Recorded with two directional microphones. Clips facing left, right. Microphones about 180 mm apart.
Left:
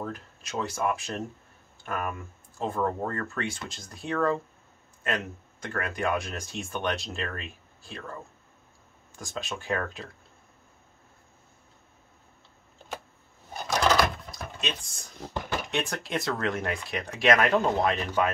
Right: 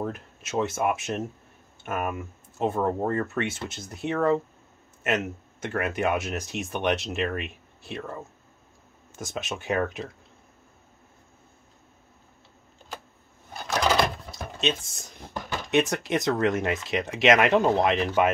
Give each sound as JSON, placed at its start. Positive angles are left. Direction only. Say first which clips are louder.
{"t": 0.0, "sound": "speech", "louder": "right 4 dB", "side_deg": -25}
{"t": 13.8, "sound": "typing", "louder": "even", "side_deg": -25}
{"t": 15.7, "sound": "speech", "louder": "right 10 dB", "side_deg": -20}